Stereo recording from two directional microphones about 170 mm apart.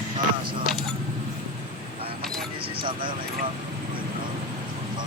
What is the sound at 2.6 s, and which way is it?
Vehicle, 30° right (ahead or behind).